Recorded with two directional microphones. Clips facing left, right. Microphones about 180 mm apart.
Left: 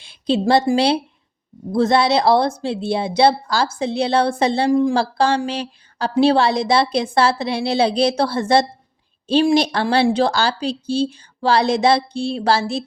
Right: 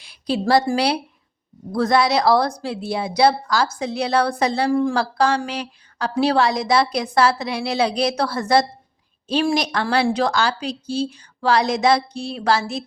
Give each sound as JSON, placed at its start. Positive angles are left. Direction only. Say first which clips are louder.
{"t": 0.0, "sound": "a sound", "louder": "left 4 dB", "side_deg": 25}
{"t": 0.8, "sound": "speech", "louder": "left 3 dB", "side_deg": 25}
{"t": 4.9, "sound": "a woman's voice", "louder": "left 2 dB", "side_deg": 30}